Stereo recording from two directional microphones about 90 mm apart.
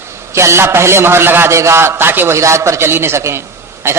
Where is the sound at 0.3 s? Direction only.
30° right (ahead or behind).